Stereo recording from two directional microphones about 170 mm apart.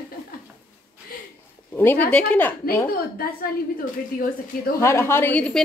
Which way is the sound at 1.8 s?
10° left (ahead or behind).